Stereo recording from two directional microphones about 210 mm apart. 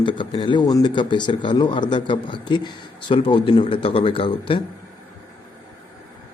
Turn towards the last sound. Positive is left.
turn(degrees=25)  # may be behind; listen again after turning